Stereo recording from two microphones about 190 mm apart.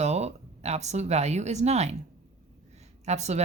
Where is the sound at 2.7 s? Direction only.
35° right (ahead or behind).